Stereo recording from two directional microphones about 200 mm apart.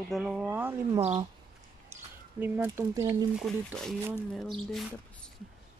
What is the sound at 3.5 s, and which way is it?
Speech, centre (ahead or behind).